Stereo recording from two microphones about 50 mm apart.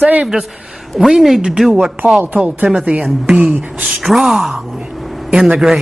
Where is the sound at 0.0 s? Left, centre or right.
Right.